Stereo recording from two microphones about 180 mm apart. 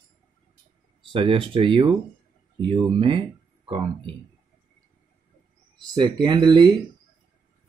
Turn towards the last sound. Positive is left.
turn(degrees=-25)  # may be behind; listen again after turning